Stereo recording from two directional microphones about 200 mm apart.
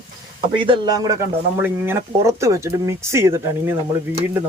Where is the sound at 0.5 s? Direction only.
25° right (ahead or behind).